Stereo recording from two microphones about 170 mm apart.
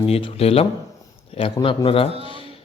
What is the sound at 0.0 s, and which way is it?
A man's voice, 35° left (ahead or behind).